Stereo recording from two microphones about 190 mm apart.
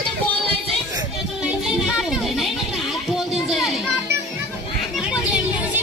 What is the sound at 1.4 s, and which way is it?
Music, centre (ahead or behind).